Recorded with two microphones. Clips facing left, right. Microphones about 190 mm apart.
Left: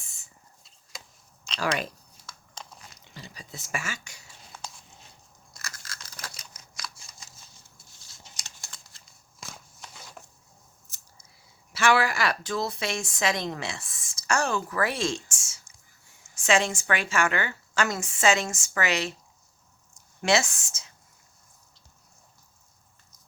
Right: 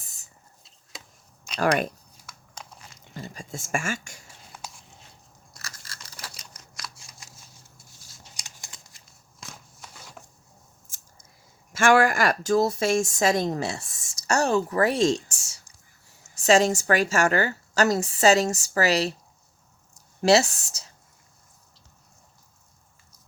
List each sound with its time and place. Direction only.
0.0 s a sound: 40° right (ahead or behind)
0.9 s a sound: centre (ahead or behind)
1.5 s speech: 55° right (ahead or behind)
2.9 s speech: 50° right (ahead or behind)
6.2 s crumpling: 5° right (ahead or behind)
8.4 s a sound: 15° right (ahead or behind)
9.4 s walk: centre (ahead or behind)
10.9 s scissors: 50° right (ahead or behind)
11.7 s a woman's voice: 45° right (ahead or behind)
20.2 s speech: 35° right (ahead or behind)